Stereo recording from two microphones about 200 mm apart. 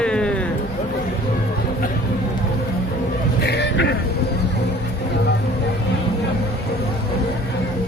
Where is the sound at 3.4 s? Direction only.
60° left (ahead or behind).